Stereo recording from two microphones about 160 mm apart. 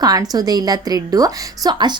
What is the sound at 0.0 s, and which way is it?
A woman's voice, 25° right (ahead or behind).